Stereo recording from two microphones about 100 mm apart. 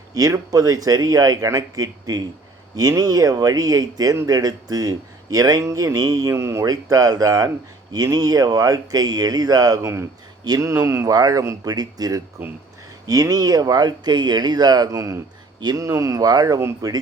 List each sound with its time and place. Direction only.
0.1 s speech: 35° right (ahead or behind)
16.6 s speech: 25° right (ahead or behind)